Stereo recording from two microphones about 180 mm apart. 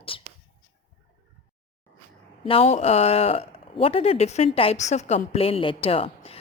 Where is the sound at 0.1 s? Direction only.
30° left (ahead or behind).